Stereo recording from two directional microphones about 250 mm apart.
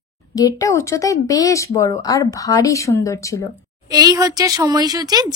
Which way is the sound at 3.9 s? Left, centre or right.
Centre.